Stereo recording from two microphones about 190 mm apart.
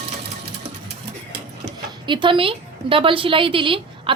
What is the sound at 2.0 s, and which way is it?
A woman's voice, 25° right (ahead or behind).